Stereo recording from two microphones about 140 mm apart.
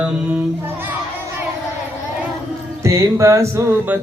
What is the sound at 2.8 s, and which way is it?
Music, 20° right (ahead or behind).